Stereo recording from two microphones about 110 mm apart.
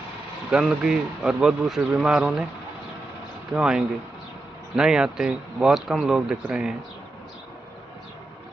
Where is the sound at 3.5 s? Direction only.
5° right (ahead or behind).